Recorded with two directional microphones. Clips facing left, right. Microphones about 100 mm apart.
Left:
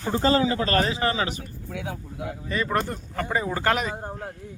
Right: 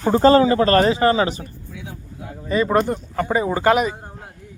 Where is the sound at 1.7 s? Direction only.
90° left.